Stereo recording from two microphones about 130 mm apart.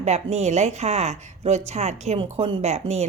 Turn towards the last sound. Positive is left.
turn(degrees=-55)  # may be behind; listen again after turning